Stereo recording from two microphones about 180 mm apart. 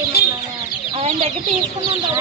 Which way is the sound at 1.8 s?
25° right (ahead or behind).